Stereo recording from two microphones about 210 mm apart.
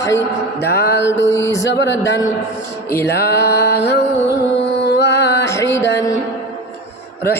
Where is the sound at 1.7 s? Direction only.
60° left (ahead or behind).